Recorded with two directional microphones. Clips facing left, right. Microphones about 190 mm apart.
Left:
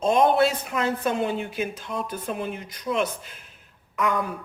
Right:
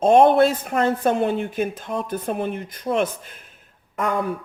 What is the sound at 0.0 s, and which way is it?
A woman's voice, 50° right (ahead or behind).